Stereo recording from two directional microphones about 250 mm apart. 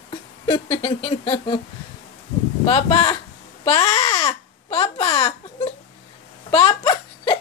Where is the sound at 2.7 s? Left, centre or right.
Left.